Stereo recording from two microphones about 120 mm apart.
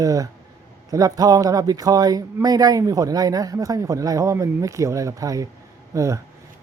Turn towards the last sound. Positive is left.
turn(degrees=-25)  # may be behind; listen again after turning